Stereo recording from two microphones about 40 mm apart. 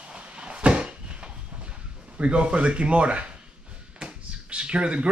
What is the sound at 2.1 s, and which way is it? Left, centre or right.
Speech, right.